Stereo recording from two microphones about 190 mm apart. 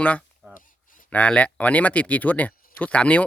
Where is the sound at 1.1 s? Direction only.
5° left (ahead or behind).